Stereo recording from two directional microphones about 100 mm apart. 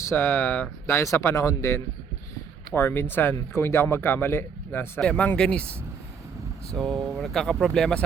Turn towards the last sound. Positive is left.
turn(degrees=5)  # may be behind; listen again after turning